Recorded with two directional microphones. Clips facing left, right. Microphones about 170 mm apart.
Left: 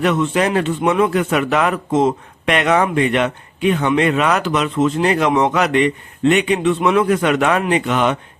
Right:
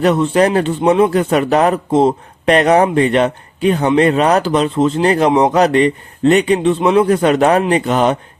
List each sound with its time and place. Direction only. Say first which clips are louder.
0.0 s a man's voice: right 4 dB; 35° right (ahead or behind)